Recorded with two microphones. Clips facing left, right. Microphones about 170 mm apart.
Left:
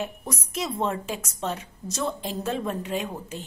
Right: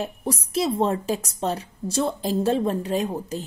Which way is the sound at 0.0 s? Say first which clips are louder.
Right 5 dB; 30° right (ahead or behind).